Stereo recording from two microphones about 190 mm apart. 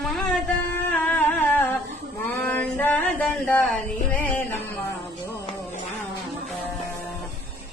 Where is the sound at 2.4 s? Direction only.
10° left (ahead or behind).